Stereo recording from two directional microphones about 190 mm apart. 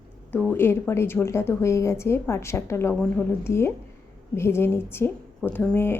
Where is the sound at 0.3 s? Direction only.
10° left (ahead or behind).